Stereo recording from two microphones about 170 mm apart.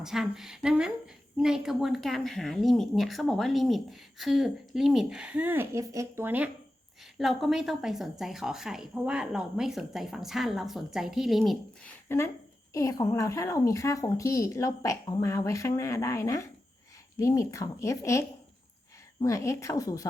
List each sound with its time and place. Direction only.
0.0 s a woman's voice: centre (ahead or behind)
12.0 s a woman's voice: 15° left (ahead or behind)